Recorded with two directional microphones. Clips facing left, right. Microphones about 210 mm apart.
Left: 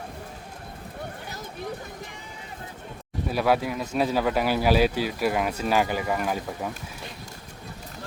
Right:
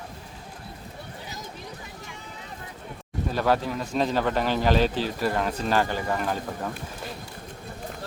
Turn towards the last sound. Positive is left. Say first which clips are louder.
# even
turn(degrees=10)  # may be behind; listen again after turning